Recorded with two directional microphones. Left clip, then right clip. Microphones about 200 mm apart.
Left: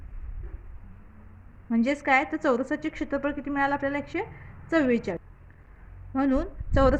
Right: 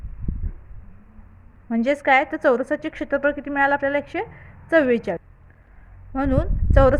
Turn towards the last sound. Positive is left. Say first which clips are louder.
# right 6 dB
turn(degrees=-35)  # may be behind; listen again after turning